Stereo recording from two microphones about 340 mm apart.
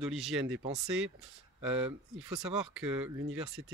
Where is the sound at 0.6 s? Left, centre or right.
Centre.